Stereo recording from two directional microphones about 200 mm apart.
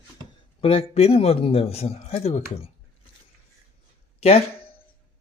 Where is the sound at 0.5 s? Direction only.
30° left (ahead or behind).